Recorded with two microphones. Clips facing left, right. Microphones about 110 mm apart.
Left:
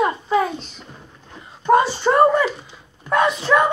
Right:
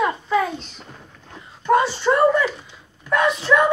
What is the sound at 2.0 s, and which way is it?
Speech, 30° left (ahead or behind).